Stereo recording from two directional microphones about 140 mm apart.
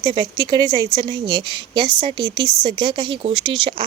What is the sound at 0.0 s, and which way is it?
Speech, 35° right (ahead or behind).